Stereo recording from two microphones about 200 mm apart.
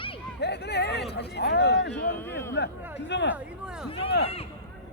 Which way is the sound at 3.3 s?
5° right (ahead or behind).